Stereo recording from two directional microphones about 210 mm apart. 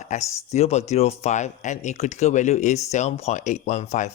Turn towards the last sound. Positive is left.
turn(degrees=35)  # may be behind; listen again after turning